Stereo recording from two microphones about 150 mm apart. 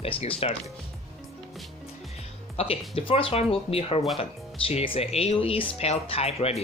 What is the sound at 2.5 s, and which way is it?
Speech, 40° left (ahead or behind).